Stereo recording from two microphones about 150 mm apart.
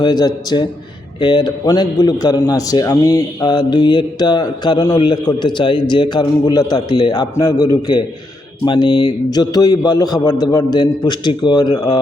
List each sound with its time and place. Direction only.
0.0 s a man's voice: 25° left (ahead or behind)